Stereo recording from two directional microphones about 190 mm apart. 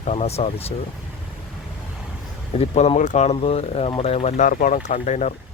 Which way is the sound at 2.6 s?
35° left (ahead or behind).